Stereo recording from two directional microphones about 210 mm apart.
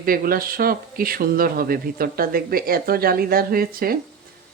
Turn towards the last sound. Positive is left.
turn(degrees=-45)  # may be behind; listen again after turning